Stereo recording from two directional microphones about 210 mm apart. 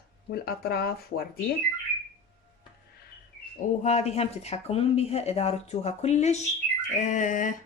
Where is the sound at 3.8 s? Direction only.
30° left (ahead or behind).